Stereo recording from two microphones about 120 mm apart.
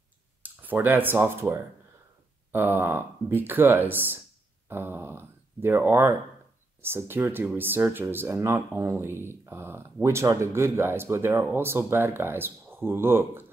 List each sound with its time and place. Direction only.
0.4 s speech: 15° right (ahead or behind)